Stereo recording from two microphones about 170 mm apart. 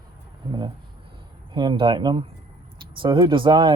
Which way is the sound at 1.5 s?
25° right (ahead or behind).